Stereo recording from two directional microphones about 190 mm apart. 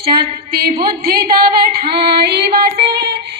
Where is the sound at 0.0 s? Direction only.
55° right (ahead or behind).